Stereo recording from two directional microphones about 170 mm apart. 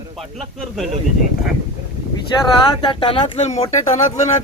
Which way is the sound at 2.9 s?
30° left (ahead or behind).